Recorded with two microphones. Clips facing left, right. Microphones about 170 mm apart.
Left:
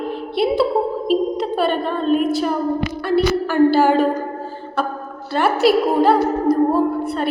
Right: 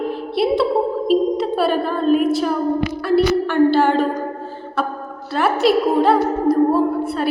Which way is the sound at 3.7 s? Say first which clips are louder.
Left 1 dB; 5° left (ahead or behind).